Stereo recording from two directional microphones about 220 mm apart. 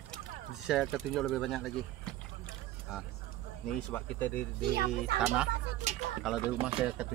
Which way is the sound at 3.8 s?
5° left (ahead or behind).